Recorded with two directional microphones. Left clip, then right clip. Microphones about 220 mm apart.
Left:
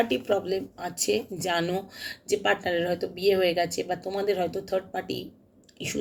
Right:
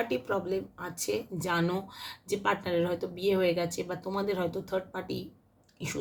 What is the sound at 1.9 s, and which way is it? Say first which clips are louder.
Speech: left 5 dB; 50° right (ahead or behind).